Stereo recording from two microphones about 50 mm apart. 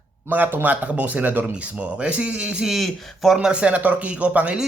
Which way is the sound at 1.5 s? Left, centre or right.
Right.